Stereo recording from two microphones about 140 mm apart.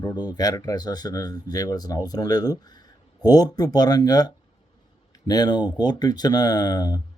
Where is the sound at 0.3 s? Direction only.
25° left (ahead or behind).